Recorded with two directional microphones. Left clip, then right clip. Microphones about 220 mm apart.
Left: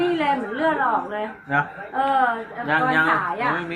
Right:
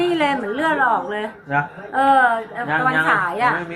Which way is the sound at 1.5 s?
Centre (ahead or behind).